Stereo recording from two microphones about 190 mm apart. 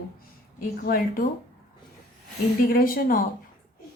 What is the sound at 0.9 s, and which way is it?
Speech, 45° left (ahead or behind).